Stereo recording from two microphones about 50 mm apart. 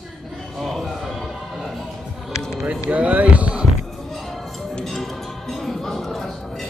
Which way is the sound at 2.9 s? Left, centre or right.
Right.